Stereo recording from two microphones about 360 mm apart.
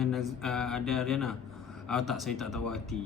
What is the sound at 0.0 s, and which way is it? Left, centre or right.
A man's voice, centre.